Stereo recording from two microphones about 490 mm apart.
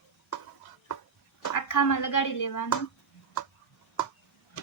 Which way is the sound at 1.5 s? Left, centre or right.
Left.